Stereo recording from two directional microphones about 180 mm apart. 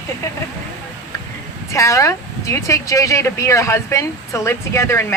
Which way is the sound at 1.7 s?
15° left (ahead or behind).